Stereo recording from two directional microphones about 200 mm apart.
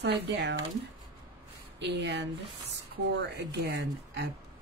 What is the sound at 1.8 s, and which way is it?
Speech, 60° right (ahead or behind).